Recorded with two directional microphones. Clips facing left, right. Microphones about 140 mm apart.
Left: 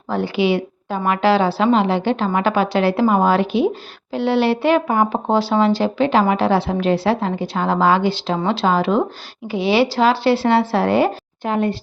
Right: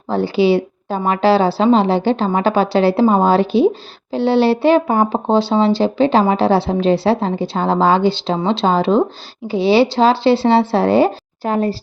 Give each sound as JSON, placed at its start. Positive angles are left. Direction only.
{"t": 0.1, "sound": "a woman's voice", "side_deg": -30}